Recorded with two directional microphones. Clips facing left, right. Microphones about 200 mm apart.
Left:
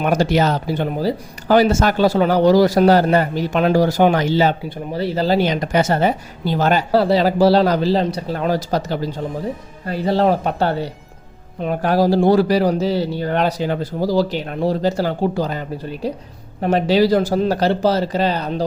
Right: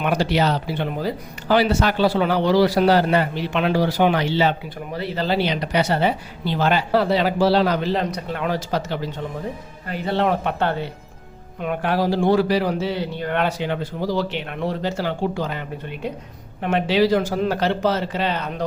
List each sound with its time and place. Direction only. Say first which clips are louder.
0.0 s a man's voice: left 4 dB; 45° left (ahead or behind)